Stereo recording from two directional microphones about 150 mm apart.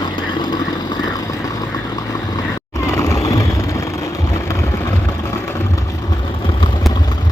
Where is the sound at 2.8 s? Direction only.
20° left (ahead or behind).